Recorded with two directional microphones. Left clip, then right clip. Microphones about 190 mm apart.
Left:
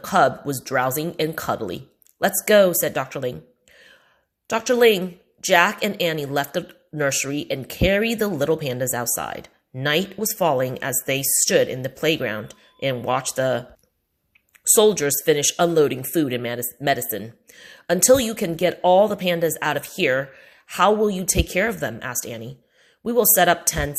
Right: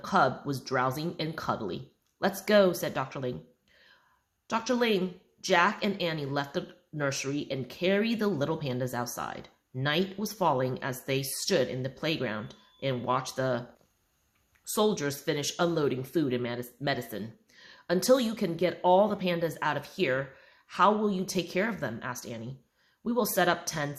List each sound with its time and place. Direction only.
0.0 s a woman's voice: 30° left (ahead or behind)
4.4 s a woman's voice: 30° left (ahead or behind)
14.8 s a woman's voice: 30° left (ahead or behind)